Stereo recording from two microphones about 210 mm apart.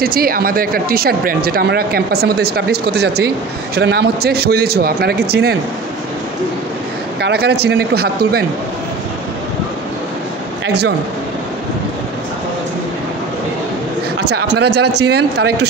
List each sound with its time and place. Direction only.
0.0 s speech: 45° right (ahead or behind)
7.2 s speech: 50° right (ahead or behind)
14.3 s speech: 55° right (ahead or behind)